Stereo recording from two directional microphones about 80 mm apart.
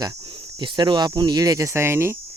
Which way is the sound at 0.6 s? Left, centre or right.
Right.